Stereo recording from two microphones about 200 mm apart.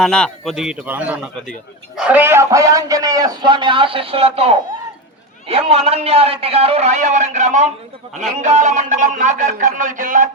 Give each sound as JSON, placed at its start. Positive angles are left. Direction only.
{"t": 0.0, "sound": "a man's voice", "side_deg": 0}